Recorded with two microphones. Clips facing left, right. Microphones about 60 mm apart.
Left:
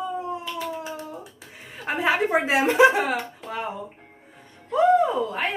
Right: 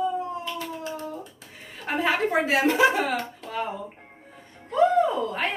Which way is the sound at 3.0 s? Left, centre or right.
Centre.